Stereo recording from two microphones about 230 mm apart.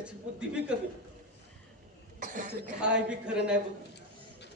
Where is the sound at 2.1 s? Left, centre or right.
Right.